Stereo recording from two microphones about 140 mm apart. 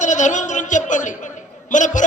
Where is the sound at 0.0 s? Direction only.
60° left (ahead or behind).